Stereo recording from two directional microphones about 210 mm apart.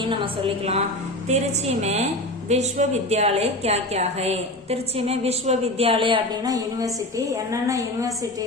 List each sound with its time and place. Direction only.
0.0 s a woman's voice: 25° right (ahead or behind)
1.8 s a woman's voice: 30° right (ahead or behind); by 8.3 s 15° right (ahead or behind)